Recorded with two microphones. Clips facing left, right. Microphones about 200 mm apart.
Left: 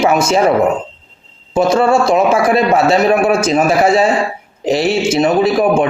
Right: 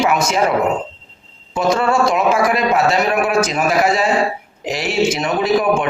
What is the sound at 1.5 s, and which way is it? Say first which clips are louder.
A man's voice: left 4 dB; 25° left (ahead or behind).